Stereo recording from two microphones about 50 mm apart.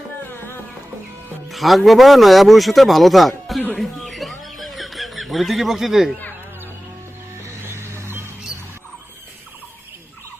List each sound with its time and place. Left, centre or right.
1.5 s speech: centre
3.8 s a sound: centre
7.6 s music: right